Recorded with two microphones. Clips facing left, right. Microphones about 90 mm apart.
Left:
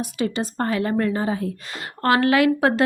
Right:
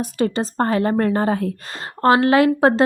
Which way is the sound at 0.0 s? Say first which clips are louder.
Right 4 dB; 40° right (ahead or behind).